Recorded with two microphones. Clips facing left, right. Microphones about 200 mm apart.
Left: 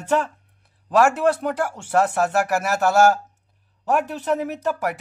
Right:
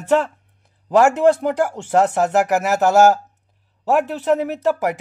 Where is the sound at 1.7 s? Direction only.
20° right (ahead or behind).